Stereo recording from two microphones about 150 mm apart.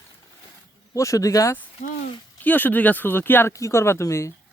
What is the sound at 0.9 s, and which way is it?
Speech, 20° left (ahead or behind).